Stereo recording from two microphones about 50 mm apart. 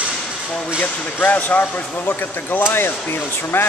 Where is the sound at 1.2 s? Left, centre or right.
Left.